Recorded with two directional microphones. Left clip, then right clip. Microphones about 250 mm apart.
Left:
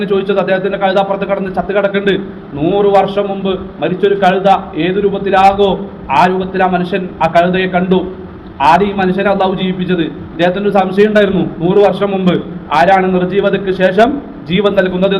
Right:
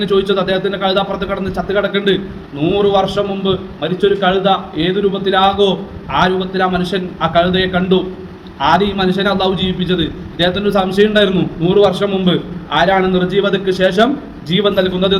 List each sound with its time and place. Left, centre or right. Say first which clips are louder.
0.0 s a man's voice: left 1 dB; centre